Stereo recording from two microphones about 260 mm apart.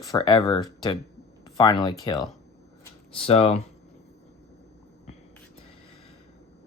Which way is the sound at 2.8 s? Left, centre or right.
Left.